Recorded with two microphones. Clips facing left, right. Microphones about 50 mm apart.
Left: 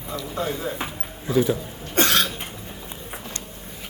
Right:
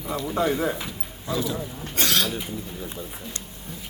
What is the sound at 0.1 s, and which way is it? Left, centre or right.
Speech, right.